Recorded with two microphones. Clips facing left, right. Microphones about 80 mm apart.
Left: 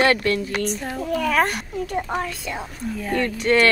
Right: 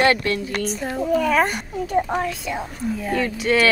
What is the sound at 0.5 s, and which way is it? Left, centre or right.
Speech, centre.